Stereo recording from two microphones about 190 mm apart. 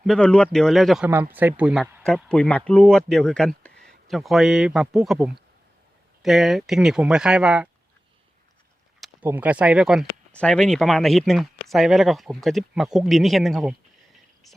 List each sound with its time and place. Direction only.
0.0 s speech: 5° left (ahead or behind)
9.0 s speech: 10° right (ahead or behind)